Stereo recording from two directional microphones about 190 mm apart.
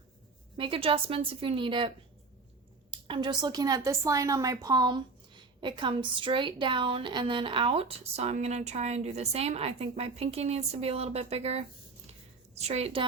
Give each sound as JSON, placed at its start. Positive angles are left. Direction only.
{"t": 0.5, "sound": "a woman's voice", "side_deg": -30}
{"t": 2.9, "sound": "a woman's voice", "side_deg": -25}